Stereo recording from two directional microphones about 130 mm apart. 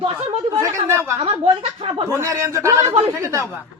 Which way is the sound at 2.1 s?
25° right (ahead or behind).